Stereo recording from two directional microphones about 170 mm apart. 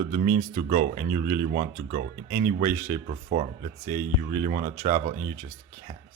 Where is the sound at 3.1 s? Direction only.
40° right (ahead or behind).